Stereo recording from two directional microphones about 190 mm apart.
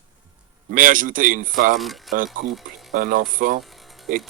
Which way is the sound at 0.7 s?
45° right (ahead or behind).